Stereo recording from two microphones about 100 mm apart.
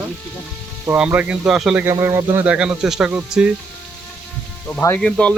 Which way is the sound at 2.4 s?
10° right (ahead or behind).